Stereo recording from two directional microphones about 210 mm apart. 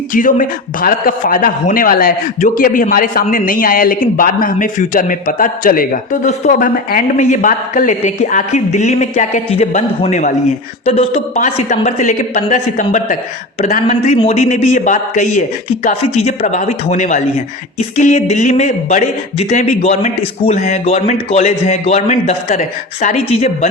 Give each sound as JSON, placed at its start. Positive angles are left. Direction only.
{"t": 0.1, "sound": "a man's voice", "side_deg": 40}